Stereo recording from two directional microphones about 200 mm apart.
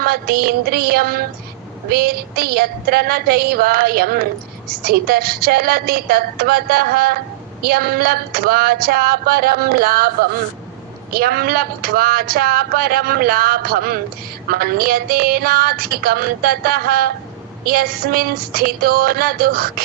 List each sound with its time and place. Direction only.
0.0 s a woman's voice: 50° right (ahead or behind)
11.1 s a woman's voice: 50° right (ahead or behind)